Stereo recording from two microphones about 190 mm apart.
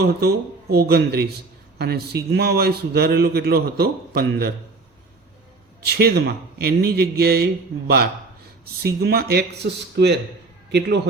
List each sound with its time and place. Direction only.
0.0 s a man's voice: 55° right (ahead or behind)
5.8 s a man's voice: 55° right (ahead or behind)